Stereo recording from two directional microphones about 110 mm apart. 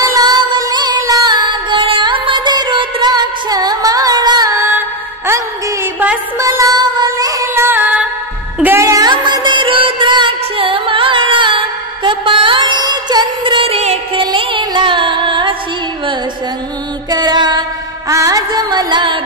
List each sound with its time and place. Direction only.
0.0 s music: 35° right (ahead or behind)
4.7 s music: 20° right (ahead or behind)
6.3 s child singing: 30° right (ahead or behind)
7.6 s music: 15° right (ahead or behind)
8.6 s music: 25° right (ahead or behind)
9.1 s music: 45° right (ahead or behind)
17.1 s music: 40° right (ahead or behind)